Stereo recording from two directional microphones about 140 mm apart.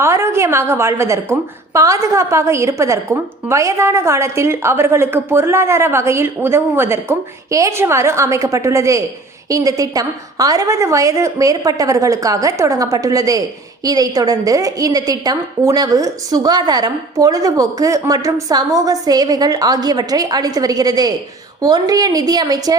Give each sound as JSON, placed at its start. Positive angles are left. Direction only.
{"t": 0.0, "sound": "a woman's voice", "side_deg": -20}